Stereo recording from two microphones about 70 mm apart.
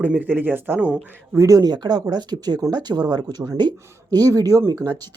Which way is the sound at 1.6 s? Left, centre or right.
Right.